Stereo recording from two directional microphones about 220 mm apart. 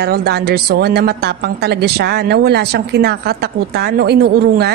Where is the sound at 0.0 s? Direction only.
45° right (ahead or behind).